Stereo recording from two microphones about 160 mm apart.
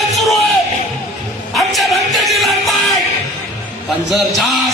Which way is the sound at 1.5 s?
Centre (ahead or behind).